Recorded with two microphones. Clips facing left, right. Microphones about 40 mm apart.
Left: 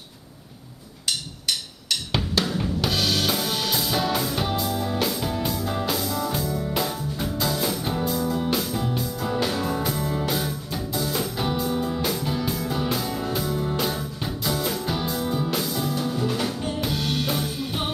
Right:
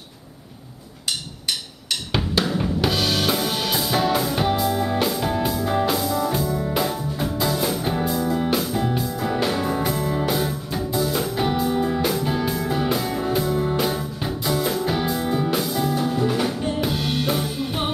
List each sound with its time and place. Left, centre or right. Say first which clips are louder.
1.9 s drum: right 2 dB; centre
5.8 s music: right 5 dB; centre